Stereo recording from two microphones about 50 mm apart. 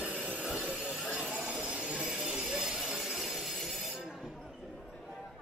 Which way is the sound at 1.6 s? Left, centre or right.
Right.